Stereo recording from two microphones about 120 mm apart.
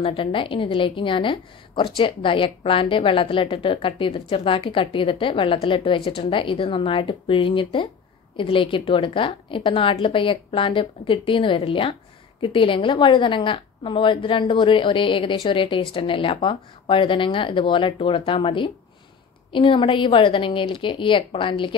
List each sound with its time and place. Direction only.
0.0 s a woman's voice: 50° left (ahead or behind)